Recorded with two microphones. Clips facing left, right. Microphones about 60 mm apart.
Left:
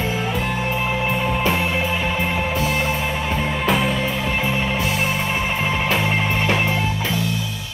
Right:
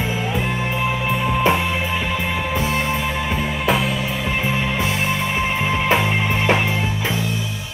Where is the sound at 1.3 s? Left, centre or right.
Centre.